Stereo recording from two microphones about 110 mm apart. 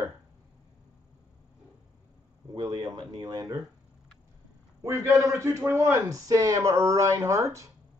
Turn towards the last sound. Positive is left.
turn(degrees=-30)  # may be behind; listen again after turning